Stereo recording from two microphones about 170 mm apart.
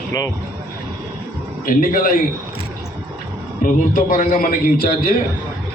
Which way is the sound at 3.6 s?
50° left (ahead or behind).